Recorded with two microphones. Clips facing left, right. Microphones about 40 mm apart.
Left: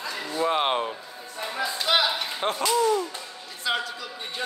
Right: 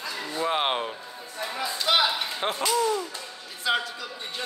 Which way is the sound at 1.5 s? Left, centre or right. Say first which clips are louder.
Even; centre.